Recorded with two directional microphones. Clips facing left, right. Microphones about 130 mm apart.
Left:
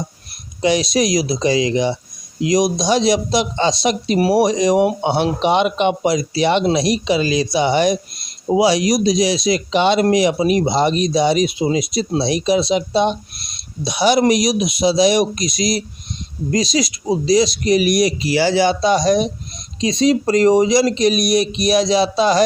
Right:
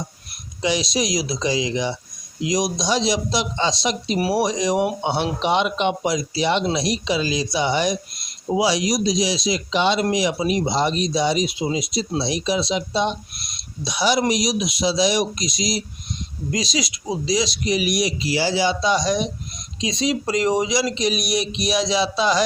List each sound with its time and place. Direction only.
0.6 s speech: 55° left (ahead or behind)
16.5 s speech: 40° left (ahead or behind)